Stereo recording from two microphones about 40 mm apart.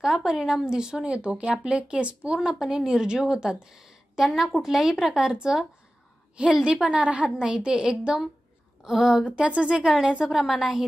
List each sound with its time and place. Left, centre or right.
0.0 s a woman's voice: centre
6.6 s a woman's voice: right
9.3 s a woman's voice: right
10.3 s a woman's voice: centre